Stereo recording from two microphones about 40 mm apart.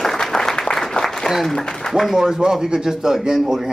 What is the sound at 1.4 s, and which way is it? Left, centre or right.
Speech, centre.